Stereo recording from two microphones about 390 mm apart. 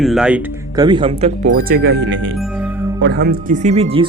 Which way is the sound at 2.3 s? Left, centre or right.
Centre.